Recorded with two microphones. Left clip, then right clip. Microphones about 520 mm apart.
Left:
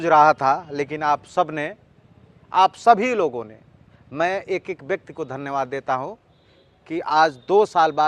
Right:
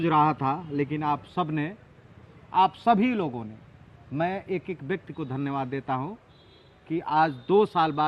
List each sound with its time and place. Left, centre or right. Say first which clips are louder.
0.0 s a man's voice: left 8 dB; left